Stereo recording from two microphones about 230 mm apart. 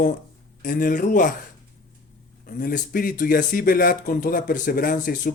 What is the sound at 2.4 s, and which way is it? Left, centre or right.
Speech, left.